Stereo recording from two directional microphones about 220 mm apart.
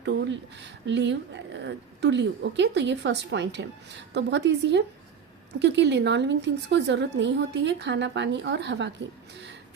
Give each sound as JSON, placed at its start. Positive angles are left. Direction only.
{"t": 0.0, "sound": "a woman's voice", "side_deg": -55}